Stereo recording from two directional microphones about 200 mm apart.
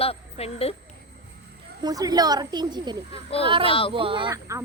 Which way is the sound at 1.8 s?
20° right (ahead or behind).